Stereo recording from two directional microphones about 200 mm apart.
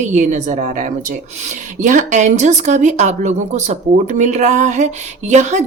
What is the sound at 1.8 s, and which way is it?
Speech, 35° right (ahead or behind).